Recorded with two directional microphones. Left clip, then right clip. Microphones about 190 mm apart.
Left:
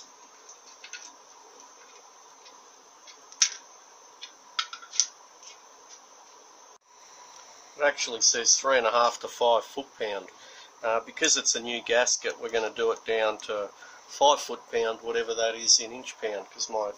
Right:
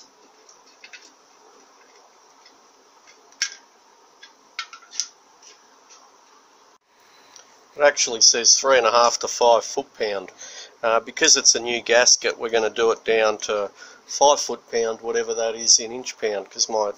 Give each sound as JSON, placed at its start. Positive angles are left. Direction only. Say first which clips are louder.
{"t": 7.7, "sound": "speech", "louder": "right 8 dB", "side_deg": -45}
{"t": 14.0, "sound": "speech", "louder": "right 5 dB", "side_deg": -30}